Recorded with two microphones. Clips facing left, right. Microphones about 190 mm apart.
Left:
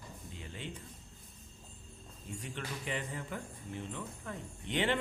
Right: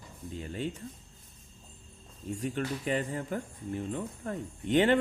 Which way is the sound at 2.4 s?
45° right (ahead or behind).